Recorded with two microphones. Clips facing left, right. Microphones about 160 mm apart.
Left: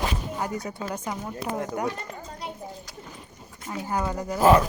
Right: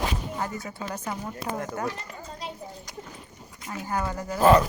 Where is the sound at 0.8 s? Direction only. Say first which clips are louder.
Left 1 dB; 10° left (ahead or behind).